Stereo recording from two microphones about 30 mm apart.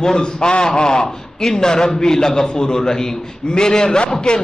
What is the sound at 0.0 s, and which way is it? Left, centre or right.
A man's voice, left.